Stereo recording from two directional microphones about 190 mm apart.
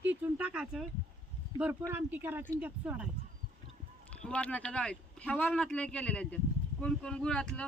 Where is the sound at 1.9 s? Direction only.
10° right (ahead or behind).